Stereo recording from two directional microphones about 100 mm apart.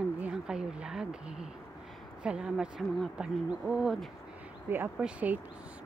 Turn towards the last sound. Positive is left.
turn(degrees=-15)  # may be behind; listen again after turning